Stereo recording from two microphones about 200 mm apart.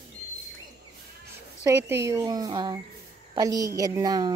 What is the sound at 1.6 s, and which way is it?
A woman's voice, 15° right (ahead or behind).